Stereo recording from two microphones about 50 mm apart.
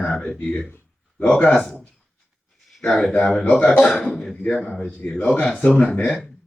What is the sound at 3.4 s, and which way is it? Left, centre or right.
Speech, left.